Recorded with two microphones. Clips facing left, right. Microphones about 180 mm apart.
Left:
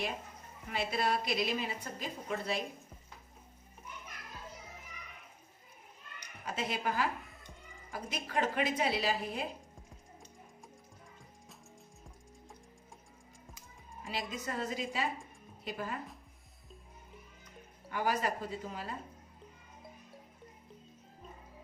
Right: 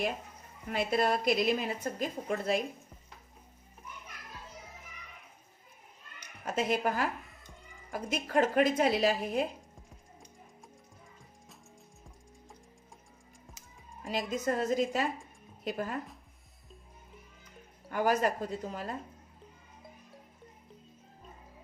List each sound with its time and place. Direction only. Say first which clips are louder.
0.7 s a woman's voice: right 4 dB; 50° right (ahead or behind)
6.4 s a woman's voice: right 6 dB; 45° right (ahead or behind)
14.0 s a woman's voice: right 7 dB; 45° right (ahead or behind)
17.9 s a woman's voice: right 5 dB; 45° right (ahead or behind)